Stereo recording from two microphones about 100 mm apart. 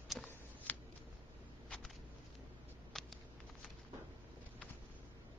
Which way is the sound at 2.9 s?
5° left (ahead or behind).